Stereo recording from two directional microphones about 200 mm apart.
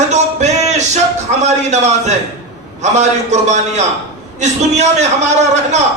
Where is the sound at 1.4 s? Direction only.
35° right (ahead or behind).